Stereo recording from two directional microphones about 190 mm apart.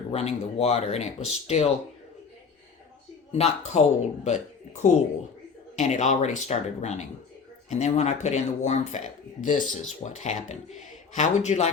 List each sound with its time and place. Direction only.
0.1 s speech: 35° left (ahead or behind)
3.3 s speech: 35° left (ahead or behind)